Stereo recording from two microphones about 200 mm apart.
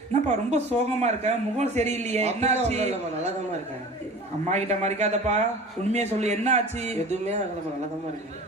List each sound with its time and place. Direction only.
0.1 s a woman's voice: 35° right (ahead or behind)
4.4 s a man's voice: 35° right (ahead or behind)